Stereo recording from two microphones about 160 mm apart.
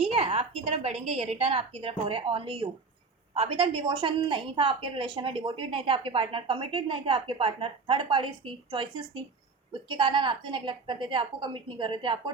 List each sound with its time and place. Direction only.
0.1 s a woman's voice: 35° right (ahead or behind)
9.9 s a woman's voice: 30° right (ahead or behind)